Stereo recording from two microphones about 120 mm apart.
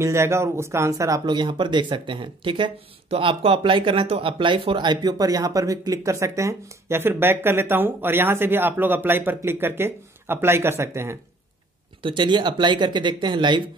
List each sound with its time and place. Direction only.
0.0 s speech: 25° right (ahead or behind)
12.0 s speech: 45° right (ahead or behind)